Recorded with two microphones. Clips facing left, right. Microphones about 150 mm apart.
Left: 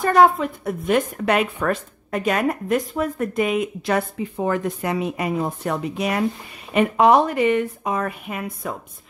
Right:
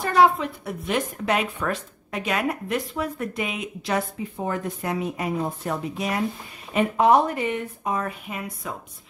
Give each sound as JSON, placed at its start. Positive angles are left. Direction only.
{"t": 0.0, "sound": "a woman's voice", "side_deg": 50}
{"t": 6.7, "sound": "speech", "side_deg": 80}